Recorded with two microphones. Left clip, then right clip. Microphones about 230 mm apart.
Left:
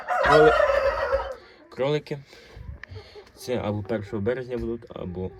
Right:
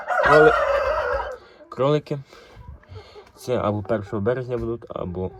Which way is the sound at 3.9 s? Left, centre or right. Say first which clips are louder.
Right 4 dB; centre.